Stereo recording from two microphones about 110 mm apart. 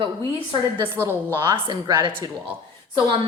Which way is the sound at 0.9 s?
20° right (ahead or behind).